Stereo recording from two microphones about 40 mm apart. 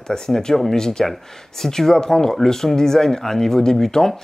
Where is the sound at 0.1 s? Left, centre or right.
Centre.